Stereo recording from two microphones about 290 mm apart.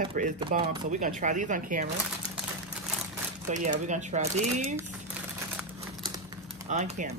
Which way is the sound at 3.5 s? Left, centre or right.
Right.